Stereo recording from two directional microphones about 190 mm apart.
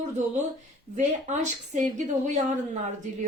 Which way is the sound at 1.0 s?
40° right (ahead or behind).